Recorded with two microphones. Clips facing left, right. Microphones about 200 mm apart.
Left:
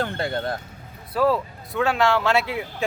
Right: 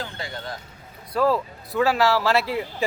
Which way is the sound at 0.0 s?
60° left (ahead or behind).